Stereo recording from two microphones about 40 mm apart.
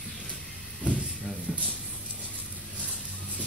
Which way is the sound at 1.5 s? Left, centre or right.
Left.